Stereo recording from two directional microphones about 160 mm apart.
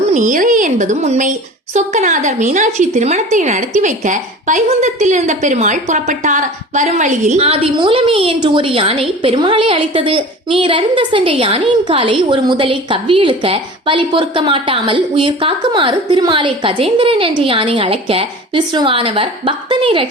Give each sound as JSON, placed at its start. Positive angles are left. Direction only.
{"t": 0.1, "sound": "a woman's voice", "side_deg": -55}